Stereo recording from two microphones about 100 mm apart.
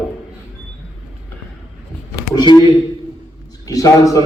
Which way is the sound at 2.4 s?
45° left (ahead or behind).